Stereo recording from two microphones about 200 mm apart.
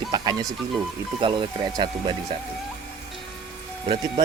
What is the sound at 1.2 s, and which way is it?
Speech, 25° right (ahead or behind).